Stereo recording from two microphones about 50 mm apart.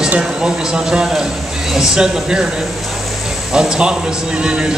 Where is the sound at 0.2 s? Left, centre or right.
Centre.